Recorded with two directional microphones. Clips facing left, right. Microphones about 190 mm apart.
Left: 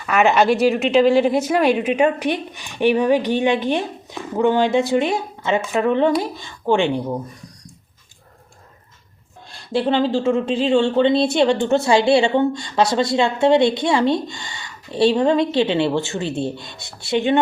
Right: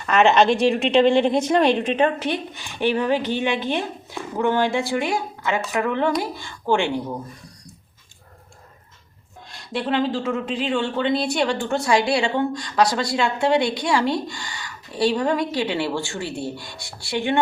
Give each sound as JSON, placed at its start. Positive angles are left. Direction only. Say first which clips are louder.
{"t": 0.0, "sound": "a woman's voice", "louder": "even", "side_deg": 10}
{"t": 9.5, "sound": "speech", "louder": "left 5 dB", "side_deg": 30}